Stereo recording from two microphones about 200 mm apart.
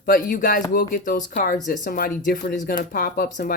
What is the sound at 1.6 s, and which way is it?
Speech, 40° left (ahead or behind).